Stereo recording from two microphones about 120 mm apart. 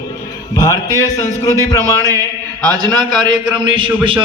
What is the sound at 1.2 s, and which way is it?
Speech, 25° left (ahead or behind).